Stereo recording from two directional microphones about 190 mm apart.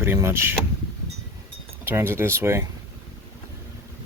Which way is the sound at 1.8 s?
10° right (ahead or behind).